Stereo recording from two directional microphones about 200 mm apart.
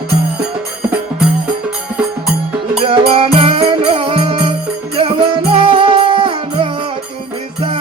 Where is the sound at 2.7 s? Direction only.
25° right (ahead or behind).